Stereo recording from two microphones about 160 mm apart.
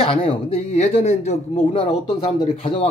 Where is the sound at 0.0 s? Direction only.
35° left (ahead or behind).